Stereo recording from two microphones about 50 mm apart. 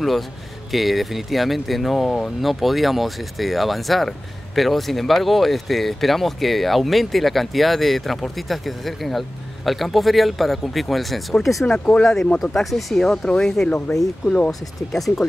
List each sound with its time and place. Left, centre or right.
0.7 s speech: centre; by 14.5 s left
14.5 s speech: centre